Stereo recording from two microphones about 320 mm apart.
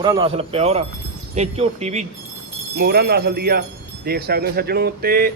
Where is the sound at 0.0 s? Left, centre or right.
Centre.